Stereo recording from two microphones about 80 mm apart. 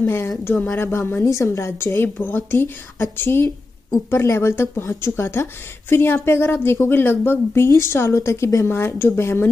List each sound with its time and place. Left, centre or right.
0.0 s a woman's voice: left